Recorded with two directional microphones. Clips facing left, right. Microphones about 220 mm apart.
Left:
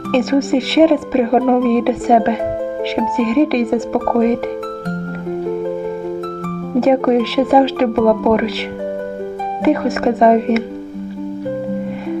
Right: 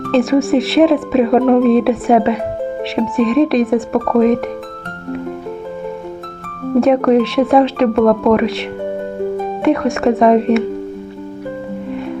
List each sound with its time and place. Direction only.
0.1 s speech: centre (ahead or behind)
6.7 s speech: centre (ahead or behind)
9.6 s speech: centre (ahead or behind)